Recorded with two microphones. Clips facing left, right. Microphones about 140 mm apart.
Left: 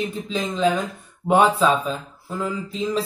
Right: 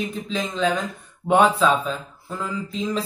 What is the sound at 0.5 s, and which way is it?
A man's voice, 10° left (ahead or behind).